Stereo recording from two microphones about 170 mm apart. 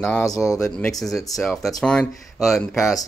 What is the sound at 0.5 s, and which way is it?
Speech, 5° left (ahead or behind).